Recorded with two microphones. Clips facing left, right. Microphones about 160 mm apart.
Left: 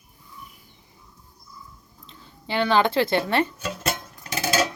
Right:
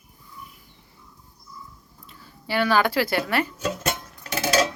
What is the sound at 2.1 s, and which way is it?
Speech, 20° left (ahead or behind).